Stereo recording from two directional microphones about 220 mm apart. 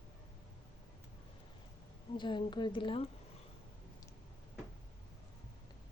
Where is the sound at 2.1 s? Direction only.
20° left (ahead or behind).